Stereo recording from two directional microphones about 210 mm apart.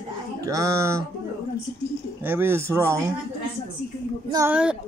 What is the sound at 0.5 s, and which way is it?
Speech, 15° right (ahead or behind).